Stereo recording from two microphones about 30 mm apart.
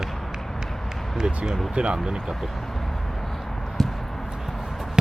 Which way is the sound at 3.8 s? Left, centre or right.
Centre.